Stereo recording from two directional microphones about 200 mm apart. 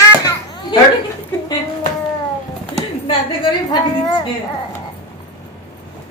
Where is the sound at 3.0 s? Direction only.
25° left (ahead or behind).